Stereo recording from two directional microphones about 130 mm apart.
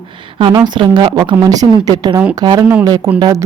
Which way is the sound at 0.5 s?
35° right (ahead or behind).